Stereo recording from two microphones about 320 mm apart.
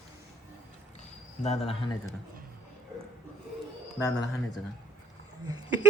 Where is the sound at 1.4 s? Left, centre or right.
Centre.